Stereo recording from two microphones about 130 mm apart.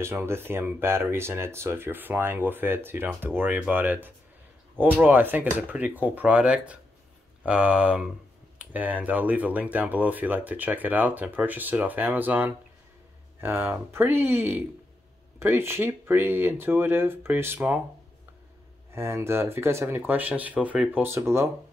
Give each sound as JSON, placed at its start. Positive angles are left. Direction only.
{"t": 0.0, "sound": "speech", "side_deg": -20}
{"t": 18.9, "sound": "speech", "side_deg": -20}